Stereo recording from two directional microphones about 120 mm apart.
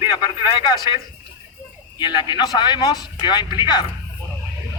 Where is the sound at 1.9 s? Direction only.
40° left (ahead or behind).